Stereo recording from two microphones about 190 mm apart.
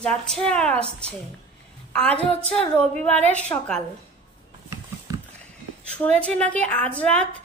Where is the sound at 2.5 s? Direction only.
5° left (ahead or behind).